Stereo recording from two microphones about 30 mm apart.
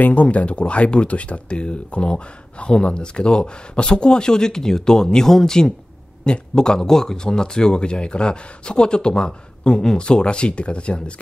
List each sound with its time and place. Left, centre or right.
0.1 s speech: left
0.5 s speech: left
1.5 s speech: left; by 5.7 s centre
6.2 s speech: left